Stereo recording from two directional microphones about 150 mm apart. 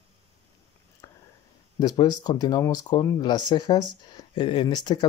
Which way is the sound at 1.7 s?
25° left (ahead or behind).